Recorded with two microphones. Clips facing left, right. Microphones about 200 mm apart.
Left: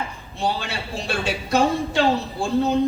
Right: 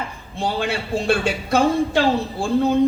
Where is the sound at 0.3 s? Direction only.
55° right (ahead or behind).